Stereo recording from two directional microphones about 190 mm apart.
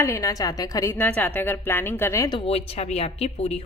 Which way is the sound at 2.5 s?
30° left (ahead or behind).